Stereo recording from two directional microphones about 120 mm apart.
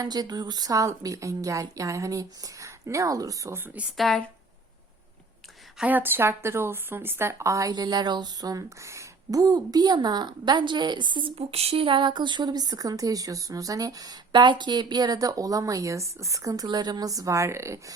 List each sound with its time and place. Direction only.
0.0 s a woman's voice: 35° right (ahead or behind); by 3.8 s 15° right (ahead or behind)
3.9 s speech: centre (ahead or behind)
5.8 s speech: 15° right (ahead or behind)